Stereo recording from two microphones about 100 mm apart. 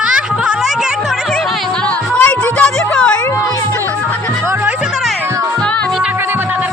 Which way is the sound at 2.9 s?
10° left (ahead or behind).